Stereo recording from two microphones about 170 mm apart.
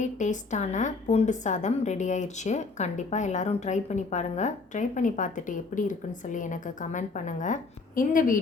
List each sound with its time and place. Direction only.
0.0 s a woman's voice: 45° left (ahead or behind)